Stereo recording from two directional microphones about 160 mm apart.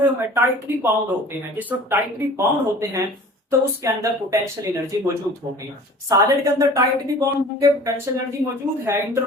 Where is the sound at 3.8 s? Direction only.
20° right (ahead or behind).